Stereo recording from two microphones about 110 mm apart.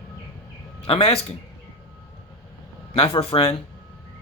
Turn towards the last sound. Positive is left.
turn(degrees=60)  # may be behind; listen again after turning